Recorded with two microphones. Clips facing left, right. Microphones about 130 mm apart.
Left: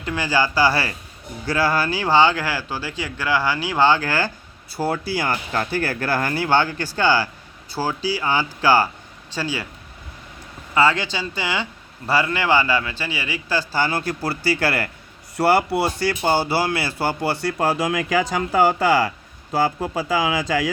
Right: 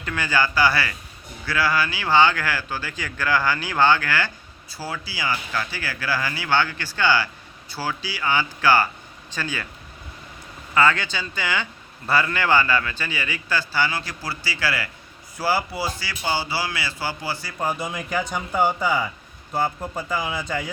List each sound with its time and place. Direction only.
0.0 s speech: 25° left (ahead or behind)
4.8 s a man's voice: 55° left (ahead or behind); by 9.6 s 30° left (ahead or behind)
10.8 s a man's voice: 25° left (ahead or behind); by 14.8 s 55° left (ahead or behind)
15.4 s speech: 70° left (ahead or behind)
19.5 s speech: 90° left